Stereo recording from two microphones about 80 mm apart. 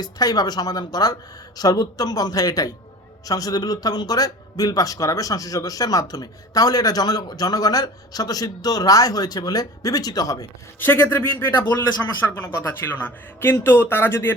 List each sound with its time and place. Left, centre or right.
0.0 s speech: left
10.8 s a man's voice: left